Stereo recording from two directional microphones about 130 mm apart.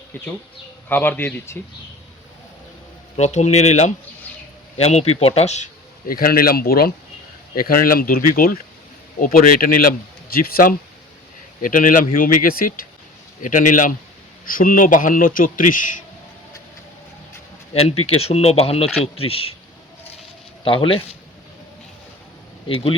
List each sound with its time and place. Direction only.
0.9 s speech: 15° left (ahead or behind)
3.2 s speech: 60° left (ahead or behind)
6.1 s a man's voice: 90° left
7.5 s a man's voice: 90° left
17.8 s speech: 50° left (ahead or behind)
20.7 s speech: 45° left (ahead or behind)
22.7 s speech: 45° left (ahead or behind)